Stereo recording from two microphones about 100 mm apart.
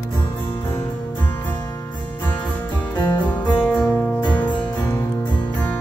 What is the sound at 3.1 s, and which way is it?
Music, 20° left (ahead or behind).